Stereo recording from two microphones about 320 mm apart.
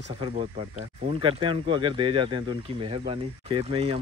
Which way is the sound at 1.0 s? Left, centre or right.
Centre.